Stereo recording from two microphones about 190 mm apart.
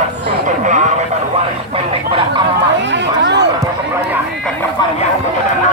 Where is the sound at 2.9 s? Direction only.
65° right (ahead or behind).